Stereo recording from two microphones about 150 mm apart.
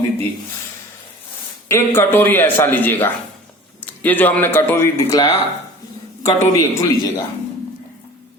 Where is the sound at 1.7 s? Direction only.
15° left (ahead or behind).